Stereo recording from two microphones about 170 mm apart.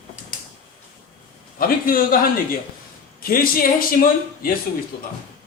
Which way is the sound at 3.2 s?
60° left (ahead or behind).